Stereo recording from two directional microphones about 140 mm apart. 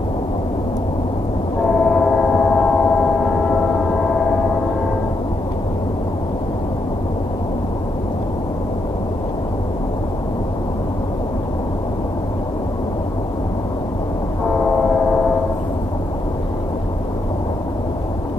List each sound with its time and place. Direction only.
1.9 s gong: 5° left (ahead or behind)